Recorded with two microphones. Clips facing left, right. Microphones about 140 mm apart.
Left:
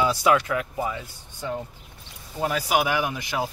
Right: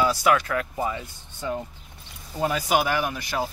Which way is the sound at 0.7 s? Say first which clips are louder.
Right 1 dB; centre (ahead or behind).